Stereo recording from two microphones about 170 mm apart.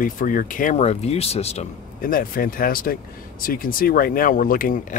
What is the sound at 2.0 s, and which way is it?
Speech, 55° left (ahead or behind).